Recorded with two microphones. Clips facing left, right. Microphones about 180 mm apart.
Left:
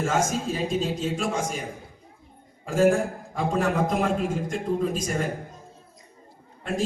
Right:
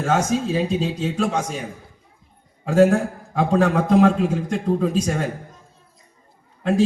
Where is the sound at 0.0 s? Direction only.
65° right (ahead or behind).